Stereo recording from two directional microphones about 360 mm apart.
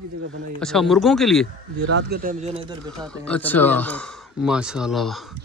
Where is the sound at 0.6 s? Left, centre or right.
Centre.